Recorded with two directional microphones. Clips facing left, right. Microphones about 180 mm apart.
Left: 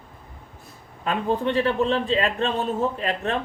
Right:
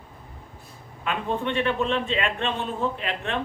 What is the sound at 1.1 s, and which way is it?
A man's voice, 35° left (ahead or behind).